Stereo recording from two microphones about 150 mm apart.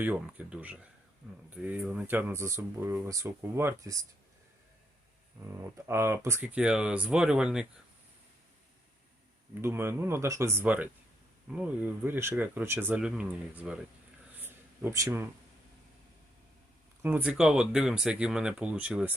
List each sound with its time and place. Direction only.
0.0 s speech: 10° right (ahead or behind)
5.5 s speech: 20° right (ahead or behind)
9.6 s speech: 15° right (ahead or behind)
14.3 s a sound: 15° right (ahead or behind)
17.0 s speech: 10° right (ahead or behind)